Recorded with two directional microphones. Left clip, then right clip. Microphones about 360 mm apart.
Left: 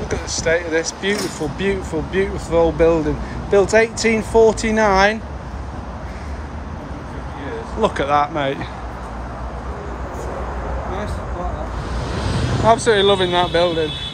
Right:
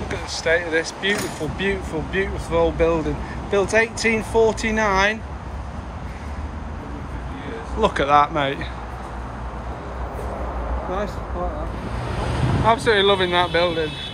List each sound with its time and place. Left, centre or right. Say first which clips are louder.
0.1 s speech: left 2 dB; centre
7.8 s speech: right 1 dB; centre
12.6 s speech: left 3 dB; centre